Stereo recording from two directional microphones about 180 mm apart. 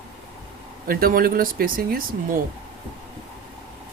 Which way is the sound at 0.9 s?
55° right (ahead or behind).